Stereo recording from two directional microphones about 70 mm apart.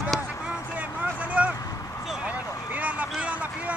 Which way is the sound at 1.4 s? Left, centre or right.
Centre.